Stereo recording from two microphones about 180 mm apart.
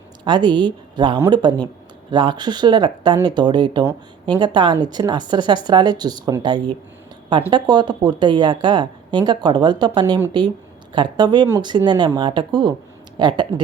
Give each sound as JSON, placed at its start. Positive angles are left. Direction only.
{"t": 0.3, "sound": "a woman's voice", "side_deg": -25}